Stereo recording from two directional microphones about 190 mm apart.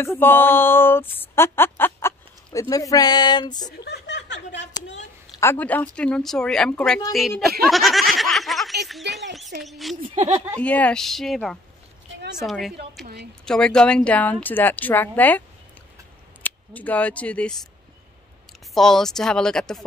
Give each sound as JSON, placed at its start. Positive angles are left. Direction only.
{"t": 0.0, "sound": "speech", "side_deg": 10}
{"t": 2.7, "sound": "a sound", "side_deg": 20}
{"t": 3.8, "sound": "a sound", "side_deg": 60}
{"t": 5.4, "sound": "speech", "side_deg": 10}
{"t": 7.7, "sound": "snicker", "side_deg": 0}
{"t": 9.6, "sound": "speech", "side_deg": 0}
{"t": 10.3, "sound": "speech", "side_deg": -15}
{"t": 10.6, "sound": "speech", "side_deg": 5}
{"t": 13.0, "sound": "a woman's voice", "side_deg": -60}
{"t": 13.5, "sound": "a woman's voice", "side_deg": 5}
{"t": 16.4, "sound": "speech", "side_deg": 10}
{"t": 18.8, "sound": "speech", "side_deg": 0}